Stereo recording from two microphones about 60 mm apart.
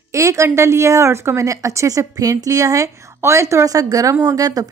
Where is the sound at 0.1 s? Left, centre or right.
Right.